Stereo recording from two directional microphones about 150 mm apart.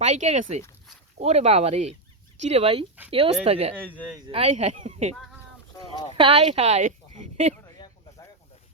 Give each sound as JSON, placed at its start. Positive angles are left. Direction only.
{"t": 0.0, "sound": "speech", "side_deg": -50}
{"t": 3.8, "sound": "speech", "side_deg": 10}
{"t": 4.3, "sound": "speech", "side_deg": -45}
{"t": 6.1, "sound": "a woman's voice", "side_deg": -40}